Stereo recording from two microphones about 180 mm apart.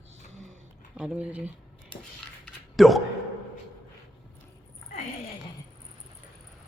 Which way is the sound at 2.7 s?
Centre (ahead or behind).